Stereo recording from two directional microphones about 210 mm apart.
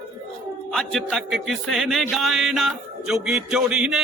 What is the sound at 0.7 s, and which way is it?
Music, centre (ahead or behind).